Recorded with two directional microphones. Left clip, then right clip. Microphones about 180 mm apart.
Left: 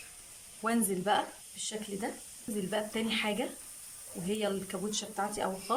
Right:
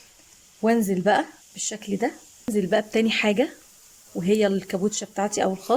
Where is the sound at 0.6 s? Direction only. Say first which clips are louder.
Right 10 dB; 40° right (ahead or behind).